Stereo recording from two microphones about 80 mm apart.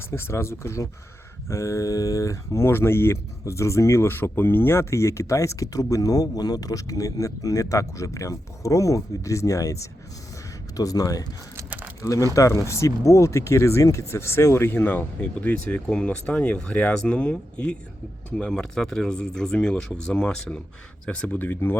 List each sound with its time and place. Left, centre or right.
0.0 s speech: left